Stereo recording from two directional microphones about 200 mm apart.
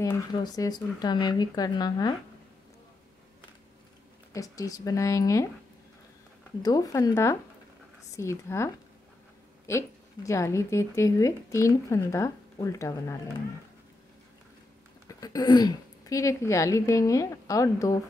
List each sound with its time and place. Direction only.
0.0 s speech: 20° left (ahead or behind)
4.3 s speech: 15° left (ahead or behind)
6.6 s speech: 20° left (ahead or behind)
15.0 s speech: 20° left (ahead or behind)